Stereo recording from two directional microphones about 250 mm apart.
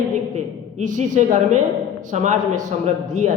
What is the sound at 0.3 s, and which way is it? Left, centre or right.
A woman's voice, right.